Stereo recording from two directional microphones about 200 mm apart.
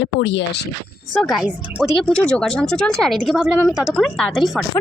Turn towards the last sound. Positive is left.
turn(degrees=0)  # may be behind; listen again after turning